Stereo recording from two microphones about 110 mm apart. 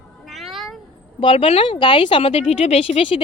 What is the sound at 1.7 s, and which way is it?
Speech, 45° left (ahead or behind).